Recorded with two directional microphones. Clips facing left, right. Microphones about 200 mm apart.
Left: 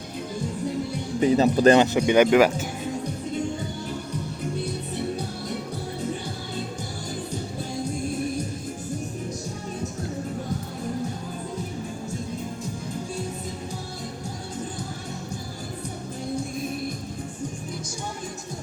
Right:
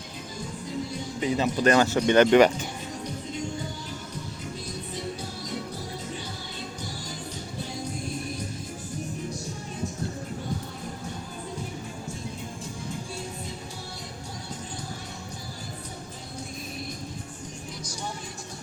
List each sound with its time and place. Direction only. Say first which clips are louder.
1.2 s speech: left 6 dB; 40° left (ahead or behind)
1.7 s speech: left 4 dB; 20° left (ahead or behind)
2.0 s speech: even; 10° left (ahead or behind)